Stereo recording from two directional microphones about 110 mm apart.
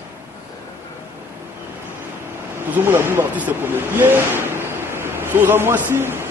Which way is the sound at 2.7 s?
20° right (ahead or behind).